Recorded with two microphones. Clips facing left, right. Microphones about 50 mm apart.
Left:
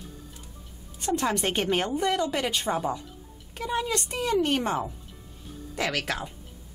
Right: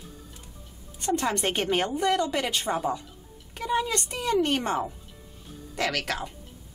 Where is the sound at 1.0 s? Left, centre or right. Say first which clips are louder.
Even; centre.